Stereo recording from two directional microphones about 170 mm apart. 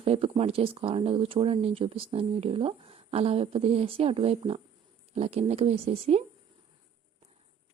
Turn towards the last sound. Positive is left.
turn(degrees=-40)  # may be behind; listen again after turning